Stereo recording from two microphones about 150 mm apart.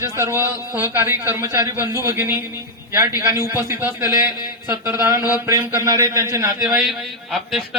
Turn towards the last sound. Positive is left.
turn(degrees=0)  # may be behind; listen again after turning